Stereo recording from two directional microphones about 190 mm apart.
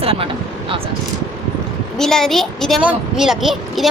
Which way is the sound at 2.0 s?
Centre (ahead or behind).